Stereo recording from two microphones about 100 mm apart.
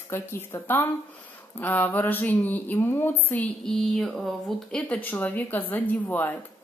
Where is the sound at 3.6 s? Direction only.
5° left (ahead or behind).